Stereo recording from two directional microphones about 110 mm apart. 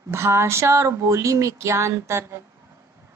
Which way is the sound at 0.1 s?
25° right (ahead or behind).